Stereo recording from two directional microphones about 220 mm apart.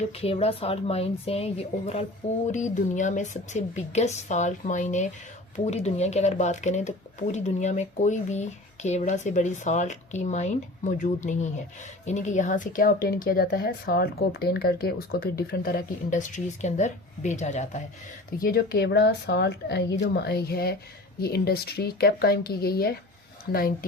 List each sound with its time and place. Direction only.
0.1 s speech: 25° left (ahead or behind)
18.3 s speech: 45° left (ahead or behind)